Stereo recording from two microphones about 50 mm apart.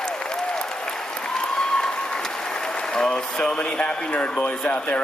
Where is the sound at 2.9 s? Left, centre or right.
Centre.